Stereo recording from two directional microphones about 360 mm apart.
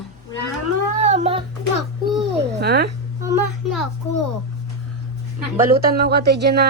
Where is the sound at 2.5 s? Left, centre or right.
Right.